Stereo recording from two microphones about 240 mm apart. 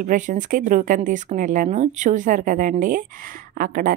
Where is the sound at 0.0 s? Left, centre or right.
Right.